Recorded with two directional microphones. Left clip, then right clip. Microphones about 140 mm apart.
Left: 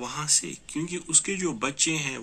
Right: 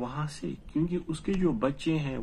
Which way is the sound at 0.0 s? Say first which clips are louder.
Left 7 dB; 40° right (ahead or behind).